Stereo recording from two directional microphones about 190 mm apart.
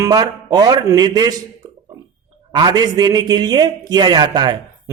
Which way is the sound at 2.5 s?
20° right (ahead or behind).